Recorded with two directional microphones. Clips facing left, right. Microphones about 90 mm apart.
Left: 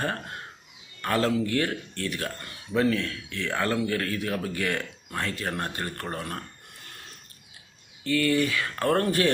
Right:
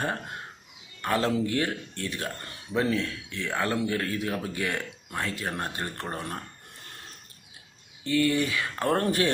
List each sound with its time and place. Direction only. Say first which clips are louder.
1.0 s speech: left 1 dB; 15° right (ahead or behind)
8.0 s speech: left 1 dB; 20° right (ahead or behind)